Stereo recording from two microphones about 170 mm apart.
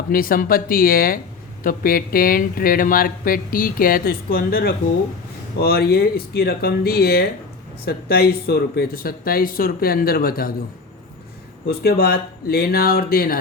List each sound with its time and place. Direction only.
0.1 s speech: 55° left (ahead or behind)
11.6 s speech: 65° left (ahead or behind)